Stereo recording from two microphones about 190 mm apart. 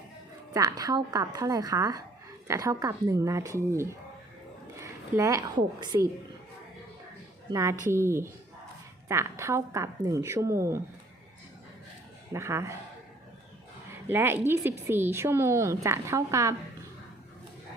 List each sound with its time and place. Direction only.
0.5 s a woman's voice: 20° right (ahead or behind)
7.5 s speech: 15° right (ahead or behind)
12.3 s speech: 15° right (ahead or behind)
13.9 s speech: 10° right (ahead or behind)